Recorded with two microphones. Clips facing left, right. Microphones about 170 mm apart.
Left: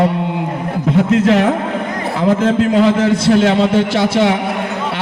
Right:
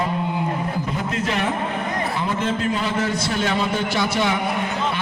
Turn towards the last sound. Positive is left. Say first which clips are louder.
# left 8 dB
turn(degrees=90)